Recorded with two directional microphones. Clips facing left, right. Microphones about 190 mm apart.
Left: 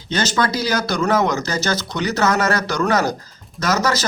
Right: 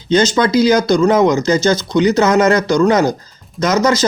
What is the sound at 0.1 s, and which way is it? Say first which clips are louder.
Speech: right 8 dB; 20° right (ahead or behind).